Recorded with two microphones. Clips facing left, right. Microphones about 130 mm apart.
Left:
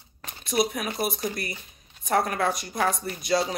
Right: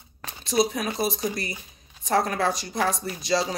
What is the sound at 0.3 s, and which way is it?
Speech, 30° right (ahead or behind).